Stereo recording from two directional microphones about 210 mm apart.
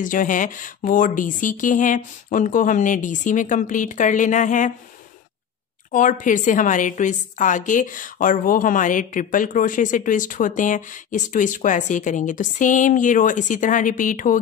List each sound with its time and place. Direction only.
0.0 s a woman's voice: 40° left (ahead or behind)
5.9 s a woman's voice: 40° left (ahead or behind)